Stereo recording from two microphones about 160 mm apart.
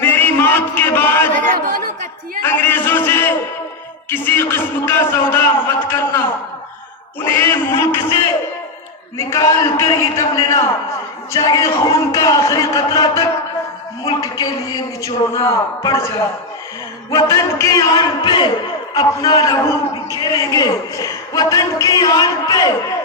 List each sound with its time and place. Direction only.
0.0 s a sound: 15° left (ahead or behind)
1.4 s speech: 60° right (ahead or behind)
2.4 s a man's voice: 15° left (ahead or behind)
9.1 s a man's voice: 20° left (ahead or behind)
17.3 s a man's voice: 20° left (ahead or behind)